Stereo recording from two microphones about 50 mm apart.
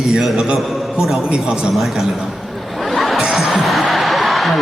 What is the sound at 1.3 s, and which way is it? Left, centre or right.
Speech, centre.